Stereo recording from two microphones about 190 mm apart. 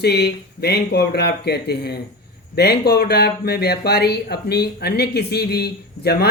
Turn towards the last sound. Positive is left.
turn(degrees=55)  # may be behind; listen again after turning